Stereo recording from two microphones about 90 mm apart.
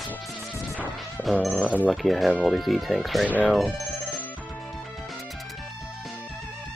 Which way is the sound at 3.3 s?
15° left (ahead or behind).